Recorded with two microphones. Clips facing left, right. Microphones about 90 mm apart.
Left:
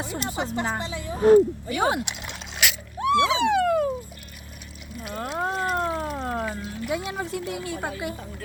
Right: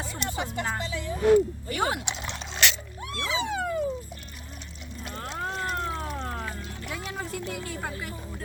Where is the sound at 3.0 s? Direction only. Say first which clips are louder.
Left 11 dB; 85° left.